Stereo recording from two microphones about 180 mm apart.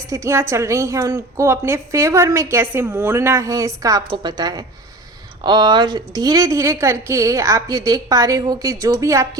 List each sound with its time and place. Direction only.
0.1 s a woman's voice: 15° right (ahead or behind)